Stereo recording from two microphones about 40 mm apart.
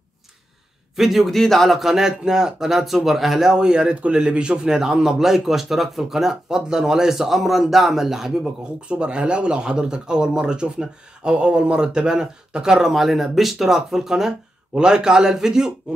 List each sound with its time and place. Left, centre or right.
0.9 s speech: centre
1.3 s speech: centre
3.5 s a man's voice: right
8.8 s a man's voice: right